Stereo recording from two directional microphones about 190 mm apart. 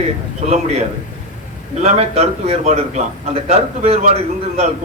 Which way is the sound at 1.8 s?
35° right (ahead or behind).